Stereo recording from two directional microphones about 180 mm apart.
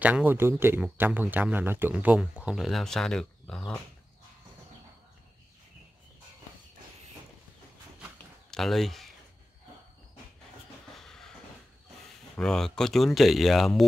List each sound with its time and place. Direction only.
0.0 s a man's voice: 10° right (ahead or behind)
8.5 s speech: centre (ahead or behind)
11.0 s a sound: centre (ahead or behind)
12.4 s speech: 5° left (ahead or behind)